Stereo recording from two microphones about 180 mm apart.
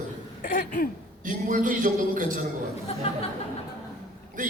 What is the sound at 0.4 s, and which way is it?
Cough, 50° left (ahead or behind).